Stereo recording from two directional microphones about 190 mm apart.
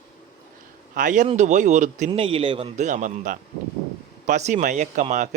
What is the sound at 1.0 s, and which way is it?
Speech, 40° right (ahead or behind).